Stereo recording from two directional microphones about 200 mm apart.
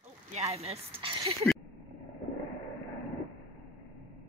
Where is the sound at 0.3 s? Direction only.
30° right (ahead or behind).